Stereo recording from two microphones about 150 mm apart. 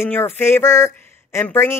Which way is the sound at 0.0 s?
15° left (ahead or behind).